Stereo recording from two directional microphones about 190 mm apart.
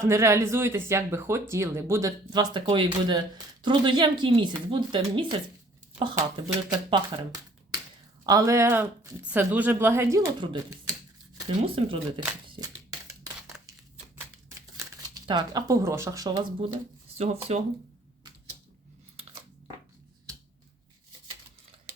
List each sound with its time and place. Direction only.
0.0 s speech: 15° right (ahead or behind)
6.7 s speech: 20° right (ahead or behind)
12.5 s a sound: 20° right (ahead or behind)
14.8 s speech: 20° right (ahead or behind)
16.7 s speech: 35° right (ahead or behind)